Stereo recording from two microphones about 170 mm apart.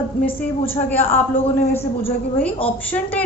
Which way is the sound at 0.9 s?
10° left (ahead or behind).